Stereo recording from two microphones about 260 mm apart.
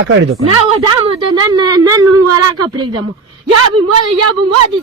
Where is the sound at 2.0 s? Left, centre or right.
Right.